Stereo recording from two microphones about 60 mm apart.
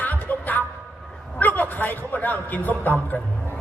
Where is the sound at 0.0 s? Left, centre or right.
Left.